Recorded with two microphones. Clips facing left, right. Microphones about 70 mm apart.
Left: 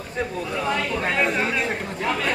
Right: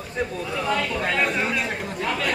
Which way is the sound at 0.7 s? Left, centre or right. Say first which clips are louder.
Right 1 dB; centre.